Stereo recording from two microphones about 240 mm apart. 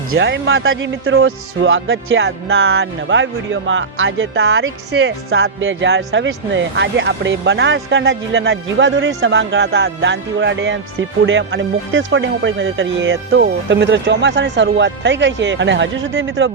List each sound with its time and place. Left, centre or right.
0.1 s speech: right